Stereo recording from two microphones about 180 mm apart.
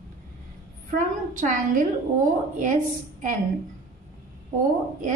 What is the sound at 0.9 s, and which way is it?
Speech, 45° right (ahead or behind).